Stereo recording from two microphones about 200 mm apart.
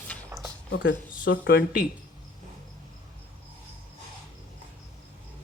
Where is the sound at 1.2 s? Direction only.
50° left (ahead or behind).